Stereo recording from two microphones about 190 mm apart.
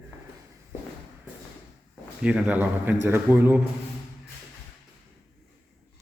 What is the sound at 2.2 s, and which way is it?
A man's voice, 5° right (ahead or behind).